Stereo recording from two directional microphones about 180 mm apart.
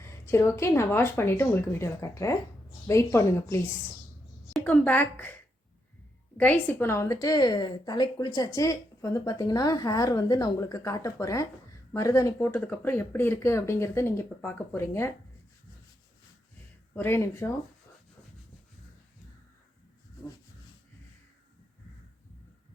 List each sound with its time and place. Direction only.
0.0 s a woman's voice: 15° left (ahead or behind)
16.9 s speech: 10° left (ahead or behind)